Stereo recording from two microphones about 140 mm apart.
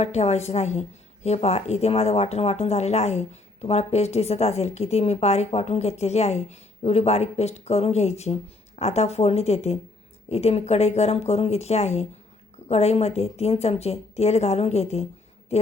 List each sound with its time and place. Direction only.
0.0 s a woman's voice: 50° left (ahead or behind)